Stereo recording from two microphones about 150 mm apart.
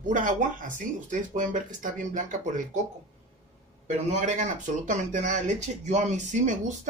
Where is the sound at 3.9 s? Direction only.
55° right (ahead or behind).